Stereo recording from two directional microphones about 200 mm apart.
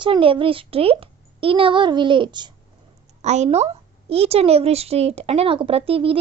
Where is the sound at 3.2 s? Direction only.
35° right (ahead or behind).